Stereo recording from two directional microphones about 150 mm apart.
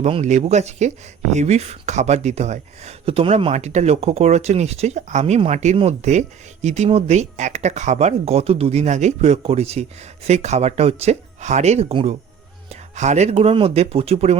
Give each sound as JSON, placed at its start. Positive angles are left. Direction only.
{"t": 0.0, "sound": "speech", "side_deg": -45}